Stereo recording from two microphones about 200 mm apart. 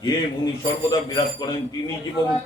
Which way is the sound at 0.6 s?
20° left (ahead or behind).